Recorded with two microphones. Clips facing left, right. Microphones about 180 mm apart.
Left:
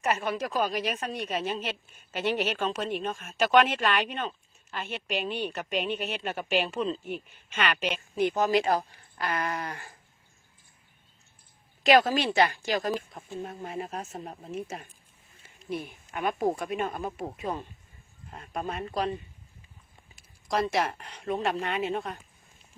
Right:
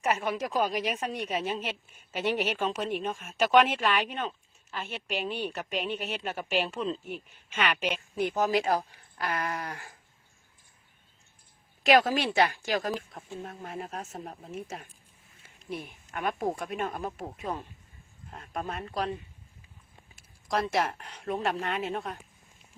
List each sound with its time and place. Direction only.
0.3 s a woman's voice: 15° right (ahead or behind)
11.9 s speech: 5° right (ahead or behind)
20.1 s speech: centre (ahead or behind)